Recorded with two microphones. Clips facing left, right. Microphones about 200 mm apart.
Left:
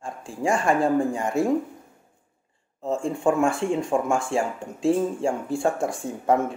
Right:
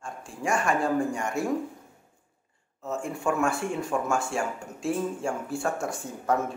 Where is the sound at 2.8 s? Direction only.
30° left (ahead or behind).